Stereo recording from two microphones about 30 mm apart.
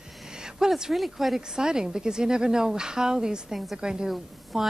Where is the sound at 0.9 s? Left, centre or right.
Centre.